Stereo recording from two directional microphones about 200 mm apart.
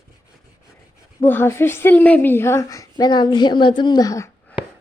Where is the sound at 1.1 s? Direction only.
10° left (ahead or behind).